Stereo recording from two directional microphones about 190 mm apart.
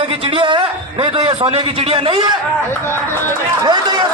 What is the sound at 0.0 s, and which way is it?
A man's voice, 30° right (ahead or behind).